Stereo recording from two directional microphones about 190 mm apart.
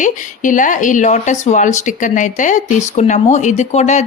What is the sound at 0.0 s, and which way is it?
Speech, 45° left (ahead or behind).